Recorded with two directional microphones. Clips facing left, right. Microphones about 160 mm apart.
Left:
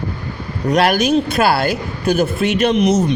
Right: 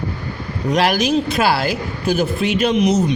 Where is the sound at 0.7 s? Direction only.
60° left (ahead or behind).